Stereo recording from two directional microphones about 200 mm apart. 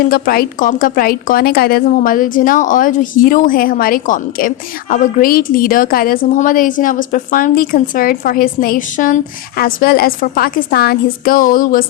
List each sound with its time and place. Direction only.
0.1 s a woman's voice: 45° left (ahead or behind)